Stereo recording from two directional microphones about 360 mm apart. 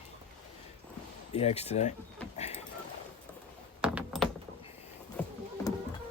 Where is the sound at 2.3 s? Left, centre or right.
Centre.